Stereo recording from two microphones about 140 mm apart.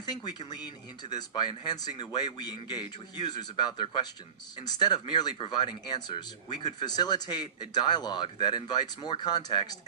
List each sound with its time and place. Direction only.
0.0 s a man's voice: 30° left (ahead or behind)